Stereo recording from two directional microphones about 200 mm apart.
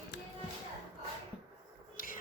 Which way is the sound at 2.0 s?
45° left (ahead or behind).